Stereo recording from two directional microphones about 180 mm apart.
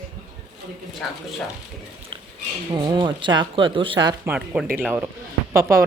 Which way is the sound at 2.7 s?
25° right (ahead or behind).